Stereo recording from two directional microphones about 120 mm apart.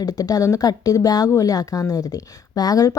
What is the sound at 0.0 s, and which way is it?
Speech, 30° left (ahead or behind).